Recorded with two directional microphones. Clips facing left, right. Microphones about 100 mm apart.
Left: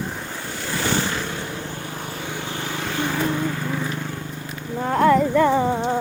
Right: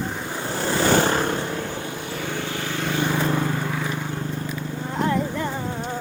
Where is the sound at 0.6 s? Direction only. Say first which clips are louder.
Right 5 dB; 45° right (ahead or behind).